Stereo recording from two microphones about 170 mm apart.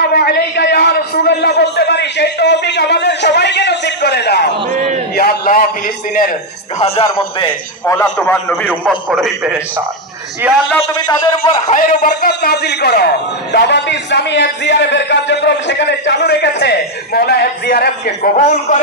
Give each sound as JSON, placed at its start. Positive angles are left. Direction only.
{"t": 0.1, "sound": "a sound", "side_deg": 70}
{"t": 5.1, "sound": "a man's voice", "side_deg": 65}
{"t": 6.8, "sound": "speech", "side_deg": 35}
{"t": 7.4, "sound": "a man's voice", "side_deg": 10}
{"t": 11.1, "sound": "speech", "side_deg": 35}
{"t": 11.7, "sound": "a man's voice", "side_deg": 55}